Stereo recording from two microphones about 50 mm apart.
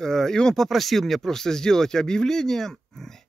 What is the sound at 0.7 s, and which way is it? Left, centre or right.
Speech, centre.